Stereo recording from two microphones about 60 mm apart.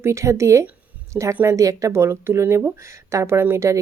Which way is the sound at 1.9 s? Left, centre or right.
Right.